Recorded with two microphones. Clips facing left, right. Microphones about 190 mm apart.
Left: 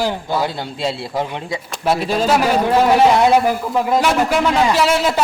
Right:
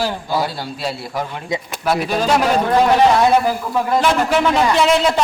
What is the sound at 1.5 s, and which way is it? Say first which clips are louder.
Speech: right 7 dB; 20° right (ahead or behind).